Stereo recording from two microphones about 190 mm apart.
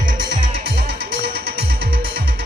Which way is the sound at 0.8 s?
55° right (ahead or behind).